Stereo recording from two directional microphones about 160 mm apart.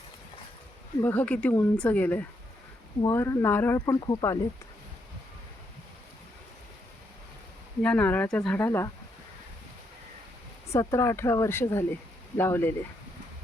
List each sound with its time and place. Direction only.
1.0 s speech: 10° left (ahead or behind)
7.8 s speech: 5° left (ahead or behind)
10.7 s speech: 15° left (ahead or behind)